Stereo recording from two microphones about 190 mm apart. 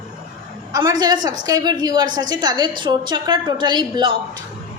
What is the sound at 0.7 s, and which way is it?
A woman's voice, 20° right (ahead or behind).